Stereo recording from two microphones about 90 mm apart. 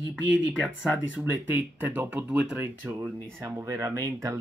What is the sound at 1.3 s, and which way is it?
Speech, 20° right (ahead or behind).